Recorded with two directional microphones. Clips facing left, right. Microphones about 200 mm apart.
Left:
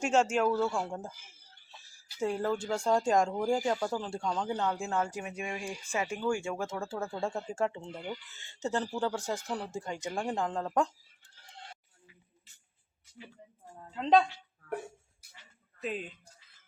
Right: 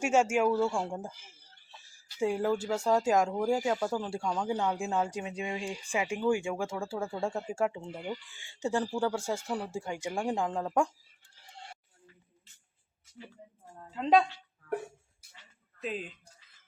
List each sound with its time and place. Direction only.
0.0 s speech: 10° right (ahead or behind)
2.1 s speech: 10° right (ahead or behind)
13.7 s a woman's voice: 5° right (ahead or behind)
15.8 s a woman's voice: centre (ahead or behind)